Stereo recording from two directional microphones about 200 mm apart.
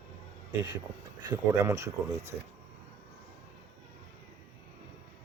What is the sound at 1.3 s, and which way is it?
Speech, 15° right (ahead or behind).